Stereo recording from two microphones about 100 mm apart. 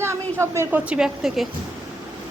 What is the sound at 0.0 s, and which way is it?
Speech, 25° right (ahead or behind).